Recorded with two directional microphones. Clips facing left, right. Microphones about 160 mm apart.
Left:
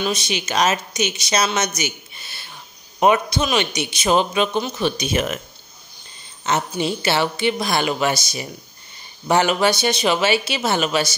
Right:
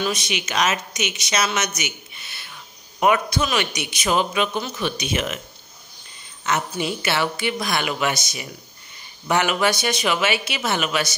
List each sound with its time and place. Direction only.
0.0 s a man's voice: 30° left (ahead or behind)
6.5 s speech: 30° left (ahead or behind)